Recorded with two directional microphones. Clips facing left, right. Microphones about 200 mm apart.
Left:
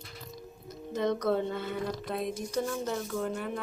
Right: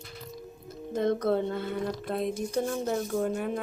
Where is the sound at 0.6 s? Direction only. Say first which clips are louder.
Right 3 dB; 50° right (ahead or behind).